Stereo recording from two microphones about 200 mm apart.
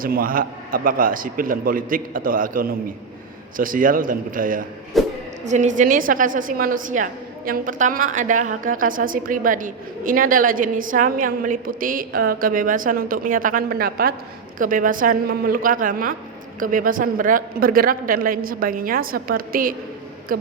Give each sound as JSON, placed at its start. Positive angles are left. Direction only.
{"t": 0.0, "sound": "a woman's voice", "side_deg": -45}
{"t": 4.9, "sound": "music", "side_deg": 0}
{"t": 5.5, "sound": "a woman's voice", "side_deg": -35}